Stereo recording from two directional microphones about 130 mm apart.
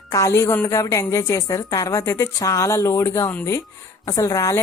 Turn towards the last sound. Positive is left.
turn(degrees=25)  # may be behind; listen again after turning